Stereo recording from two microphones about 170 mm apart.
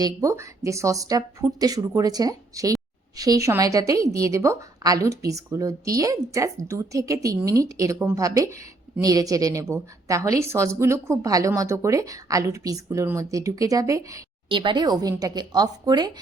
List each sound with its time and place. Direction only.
0.0 s a woman's voice: 20° right (ahead or behind)